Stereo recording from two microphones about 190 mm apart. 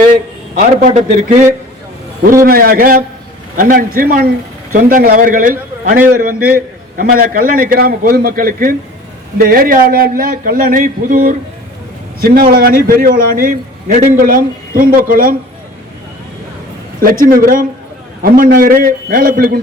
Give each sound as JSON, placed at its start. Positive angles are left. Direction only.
{"t": 0.6, "sound": "a man's voice", "side_deg": -40}
{"t": 2.4, "sound": "a man's voice", "side_deg": -50}
{"t": 17.0, "sound": "a man's voice", "side_deg": -50}